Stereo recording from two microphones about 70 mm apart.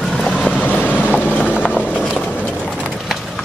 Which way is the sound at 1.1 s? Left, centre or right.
Left.